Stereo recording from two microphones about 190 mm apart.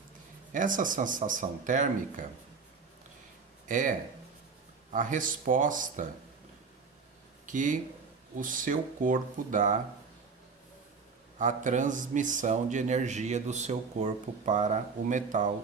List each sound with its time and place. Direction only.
0.5 s speech: 45° right (ahead or behind)
3.7 s speech: 45° right (ahead or behind)
7.4 s speech: 40° right (ahead or behind)
11.3 s speech: 40° right (ahead or behind)